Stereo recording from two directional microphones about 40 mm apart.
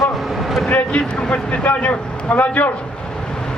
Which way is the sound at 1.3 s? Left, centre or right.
Left.